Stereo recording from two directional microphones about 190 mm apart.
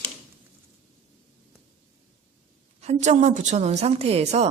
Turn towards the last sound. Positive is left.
turn(degrees=-35)  # may be behind; listen again after turning